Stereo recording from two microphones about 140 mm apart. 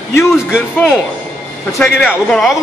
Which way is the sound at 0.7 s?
15° left (ahead or behind).